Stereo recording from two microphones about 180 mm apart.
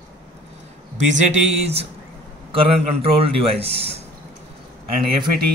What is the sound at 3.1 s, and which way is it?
Speech, 30° right (ahead or behind).